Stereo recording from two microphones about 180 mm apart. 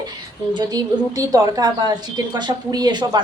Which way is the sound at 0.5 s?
20° right (ahead or behind).